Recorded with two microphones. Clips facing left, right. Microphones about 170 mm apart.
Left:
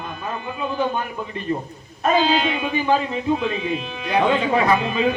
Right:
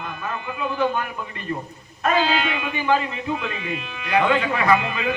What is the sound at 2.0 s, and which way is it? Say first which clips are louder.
Speech: left 2 dB; 20° left (ahead or behind).